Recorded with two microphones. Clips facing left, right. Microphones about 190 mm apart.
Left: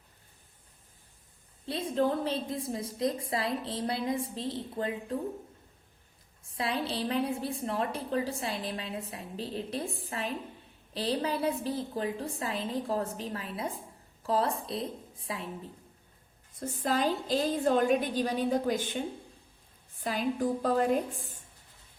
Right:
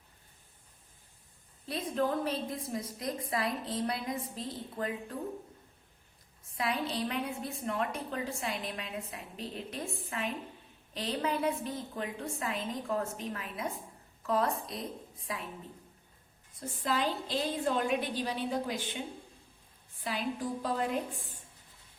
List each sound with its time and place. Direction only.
1.6 s a woman's voice: 30° left (ahead or behind)
6.5 s a woman's voice: 30° left (ahead or behind)
16.6 s a woman's voice: 45° left (ahead or behind)
20.1 s a woman's voice: 45° left (ahead or behind)